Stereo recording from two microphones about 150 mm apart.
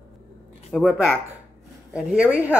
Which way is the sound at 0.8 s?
5° right (ahead or behind).